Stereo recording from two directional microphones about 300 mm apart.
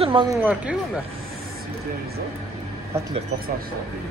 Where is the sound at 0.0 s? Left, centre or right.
Centre.